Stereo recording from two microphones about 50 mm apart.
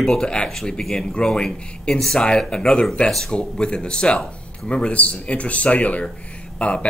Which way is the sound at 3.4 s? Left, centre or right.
Centre.